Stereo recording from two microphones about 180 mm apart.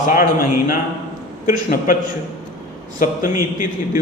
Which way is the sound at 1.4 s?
50° left (ahead or behind).